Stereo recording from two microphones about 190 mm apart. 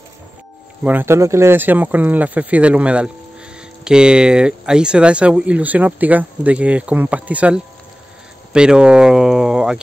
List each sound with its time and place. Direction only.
0.8 s speech: 10° right (ahead or behind)